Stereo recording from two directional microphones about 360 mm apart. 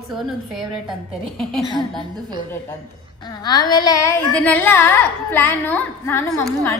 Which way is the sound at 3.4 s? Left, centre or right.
Centre.